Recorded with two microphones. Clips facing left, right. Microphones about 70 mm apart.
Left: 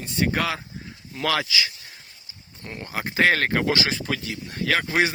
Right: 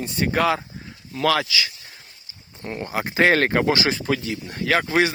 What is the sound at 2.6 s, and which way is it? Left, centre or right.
Speech, right.